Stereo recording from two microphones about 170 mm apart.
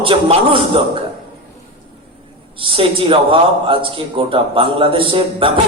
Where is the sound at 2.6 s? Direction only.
30° right (ahead or behind).